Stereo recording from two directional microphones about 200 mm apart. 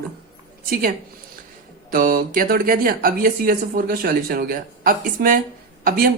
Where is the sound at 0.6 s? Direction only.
45° right (ahead or behind).